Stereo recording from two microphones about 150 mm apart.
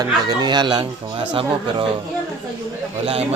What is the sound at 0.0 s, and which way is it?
Speech, 30° right (ahead or behind).